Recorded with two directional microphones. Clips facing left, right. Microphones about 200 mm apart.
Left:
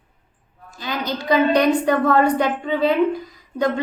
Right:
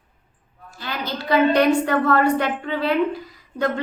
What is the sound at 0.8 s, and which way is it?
A woman's voice, 15° left (ahead or behind).